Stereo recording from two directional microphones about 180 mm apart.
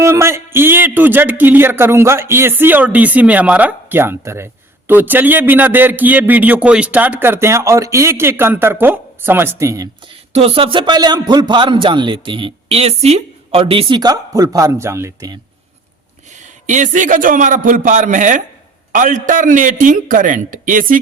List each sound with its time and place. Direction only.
0.0 s a man's voice: 15° right (ahead or behind)
10.3 s speech: 35° right (ahead or behind); by 15.4 s 15° right (ahead or behind)
16.4 s a man's voice: 45° right (ahead or behind)